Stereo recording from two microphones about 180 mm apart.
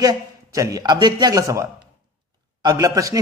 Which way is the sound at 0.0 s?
20° right (ahead or behind).